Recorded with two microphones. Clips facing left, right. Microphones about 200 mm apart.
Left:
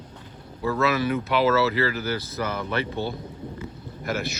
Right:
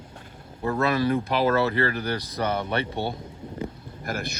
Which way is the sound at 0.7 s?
30° right (ahead or behind).